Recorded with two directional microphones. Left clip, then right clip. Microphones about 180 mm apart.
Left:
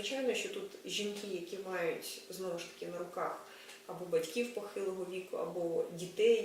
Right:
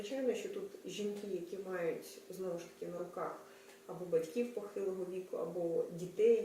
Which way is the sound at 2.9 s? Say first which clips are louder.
Left 4 dB; 15° right (ahead or behind).